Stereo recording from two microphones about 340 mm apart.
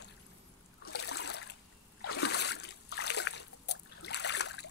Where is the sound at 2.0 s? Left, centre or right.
Left.